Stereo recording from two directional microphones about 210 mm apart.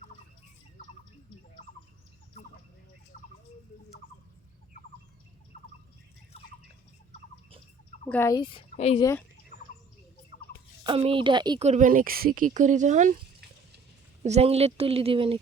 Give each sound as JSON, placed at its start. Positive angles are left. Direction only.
{"t": 6.3, "sound": "drip", "side_deg": 30}
{"t": 8.0, "sound": "speech", "side_deg": 10}
{"t": 8.4, "sound": "a woman's voice", "side_deg": 25}
{"t": 8.7, "sound": "a sound", "side_deg": 30}
{"t": 9.0, "sound": "speech", "side_deg": 15}
{"t": 9.5, "sound": "bird", "side_deg": 35}
{"t": 10.8, "sound": "a woman's voice", "side_deg": -25}
{"t": 14.2, "sound": "a woman's voice", "side_deg": -30}